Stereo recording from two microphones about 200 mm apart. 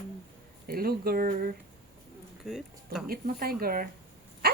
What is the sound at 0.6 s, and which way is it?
Speech, 50° right (ahead or behind).